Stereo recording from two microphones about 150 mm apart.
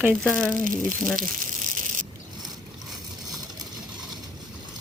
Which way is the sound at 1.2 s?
60° right (ahead or behind).